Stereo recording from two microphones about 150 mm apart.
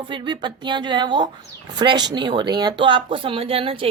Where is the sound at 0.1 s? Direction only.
30° right (ahead or behind).